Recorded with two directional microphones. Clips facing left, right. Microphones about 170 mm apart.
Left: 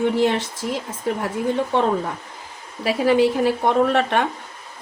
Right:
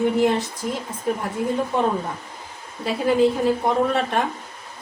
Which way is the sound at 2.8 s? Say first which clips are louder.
Left 1 dB; 90° left.